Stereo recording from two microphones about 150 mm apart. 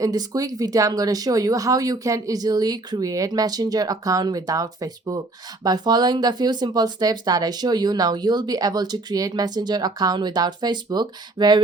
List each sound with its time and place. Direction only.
0.0 s speech: 25° right (ahead or behind)